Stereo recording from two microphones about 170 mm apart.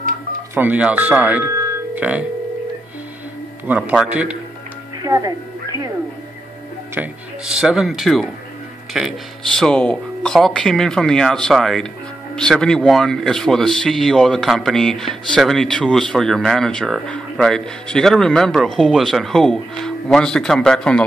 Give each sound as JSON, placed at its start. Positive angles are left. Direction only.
{"t": 0.6, "sound": "speech", "side_deg": -10}
{"t": 3.6, "sound": "a man's voice", "side_deg": -10}
{"t": 5.0, "sound": "a sound", "side_deg": -20}
{"t": 7.0, "sound": "speech", "side_deg": -5}